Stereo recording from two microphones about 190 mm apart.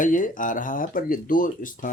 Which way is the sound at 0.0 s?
45° left (ahead or behind).